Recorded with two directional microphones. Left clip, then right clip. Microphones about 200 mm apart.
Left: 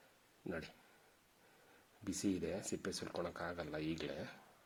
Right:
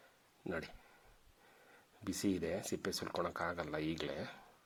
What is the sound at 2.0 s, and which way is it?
Speech, 25° right (ahead or behind).